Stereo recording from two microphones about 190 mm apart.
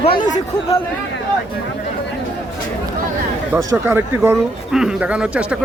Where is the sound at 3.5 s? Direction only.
15° right (ahead or behind).